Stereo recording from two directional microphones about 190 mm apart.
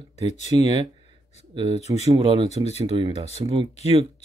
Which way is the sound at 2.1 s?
25° right (ahead or behind).